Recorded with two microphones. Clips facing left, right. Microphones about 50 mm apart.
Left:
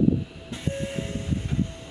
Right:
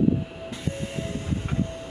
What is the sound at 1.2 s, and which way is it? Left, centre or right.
Train, right.